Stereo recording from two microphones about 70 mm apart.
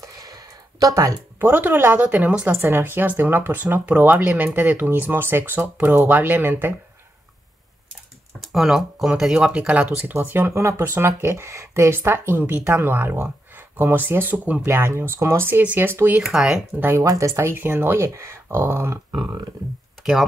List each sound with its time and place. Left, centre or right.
0.0 s a sound: right
1.4 s speech: right
8.4 s speech: centre; by 11.9 s right
11.9 s speech: right
14.7 s speech: right
16.2 s speech: centre
17.0 s speech: right
17.6 s speech: right
18.0 s speech: right